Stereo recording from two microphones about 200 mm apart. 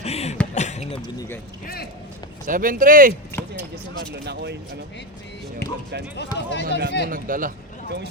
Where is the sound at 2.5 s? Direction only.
45° right (ahead or behind).